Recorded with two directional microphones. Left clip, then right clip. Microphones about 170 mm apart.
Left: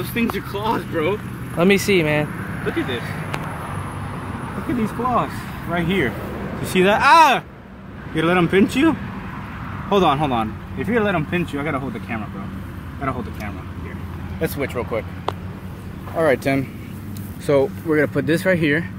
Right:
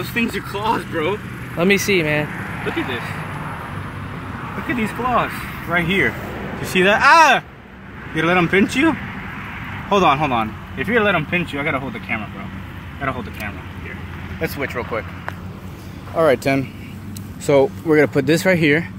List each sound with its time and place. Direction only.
0.0 s speech: 5° left (ahead or behind)
3.0 s speech: 65° left (ahead or behind)
4.7 s speech: 5° left (ahead or behind)
14.4 s speech: 20° left (ahead or behind)
16.2 s speech: 20° right (ahead or behind)